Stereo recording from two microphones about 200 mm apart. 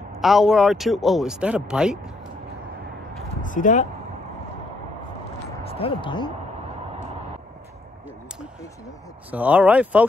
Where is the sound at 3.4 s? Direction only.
40° left (ahead or behind).